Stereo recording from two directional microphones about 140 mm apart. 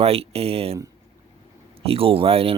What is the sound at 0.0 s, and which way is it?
Speech, 45° right (ahead or behind).